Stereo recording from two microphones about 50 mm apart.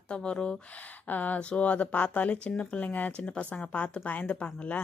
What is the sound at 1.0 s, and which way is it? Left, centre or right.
Speech, left.